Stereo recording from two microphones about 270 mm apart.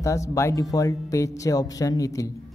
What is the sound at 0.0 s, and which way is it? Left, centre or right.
Speech, centre.